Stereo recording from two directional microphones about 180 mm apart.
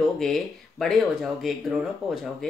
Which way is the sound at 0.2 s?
Centre (ahead or behind).